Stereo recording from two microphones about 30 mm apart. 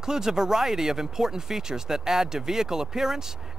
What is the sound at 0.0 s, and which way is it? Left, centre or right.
Speech, centre.